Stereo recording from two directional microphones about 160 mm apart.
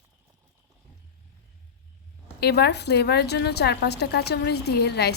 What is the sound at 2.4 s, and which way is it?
A woman's voice, 90° left.